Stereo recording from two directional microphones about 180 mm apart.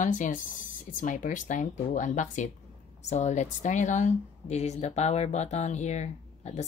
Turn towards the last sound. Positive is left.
turn(degrees=40)  # may be behind; listen again after turning